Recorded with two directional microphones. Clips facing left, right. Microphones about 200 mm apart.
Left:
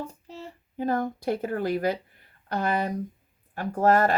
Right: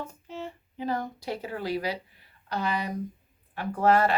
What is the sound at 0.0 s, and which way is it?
Speech, 35° left (ahead or behind).